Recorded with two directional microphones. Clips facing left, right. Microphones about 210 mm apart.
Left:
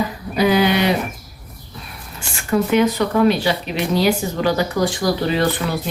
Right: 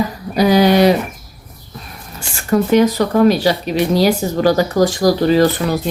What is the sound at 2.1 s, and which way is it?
Speech, 40° right (ahead or behind).